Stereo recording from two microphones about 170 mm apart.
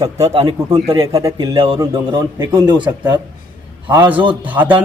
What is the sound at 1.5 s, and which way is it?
Speech, 35° right (ahead or behind).